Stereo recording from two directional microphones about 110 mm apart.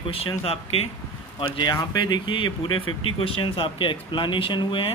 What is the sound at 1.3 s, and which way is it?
Speech, 50° left (ahead or behind).